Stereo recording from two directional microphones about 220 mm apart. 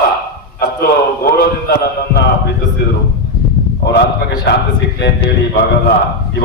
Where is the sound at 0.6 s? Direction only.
45° left (ahead or behind).